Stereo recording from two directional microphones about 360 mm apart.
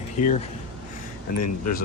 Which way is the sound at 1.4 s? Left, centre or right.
Left.